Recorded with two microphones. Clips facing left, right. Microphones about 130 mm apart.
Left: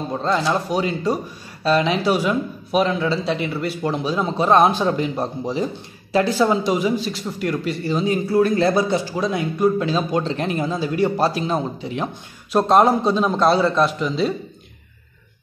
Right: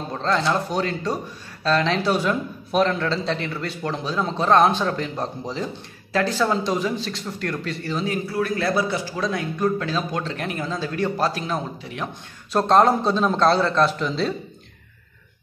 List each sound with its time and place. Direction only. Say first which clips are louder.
0.1 s speech: left 1 dB; 10° left (ahead or behind)
12.5 s a man's voice: left 2 dB; 10° left (ahead or behind)